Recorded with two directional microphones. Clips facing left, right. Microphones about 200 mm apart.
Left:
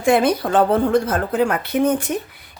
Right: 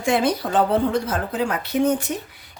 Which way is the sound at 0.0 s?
55° left (ahead or behind).